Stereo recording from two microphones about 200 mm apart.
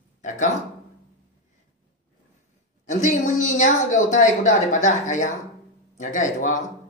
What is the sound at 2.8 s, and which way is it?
A woman's voice, 40° left (ahead or behind).